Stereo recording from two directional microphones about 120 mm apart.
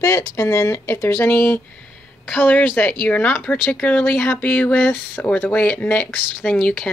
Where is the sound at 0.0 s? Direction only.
25° left (ahead or behind).